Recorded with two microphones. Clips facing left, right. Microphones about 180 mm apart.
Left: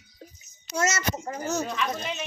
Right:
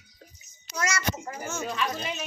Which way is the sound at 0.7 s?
25° left (ahead or behind).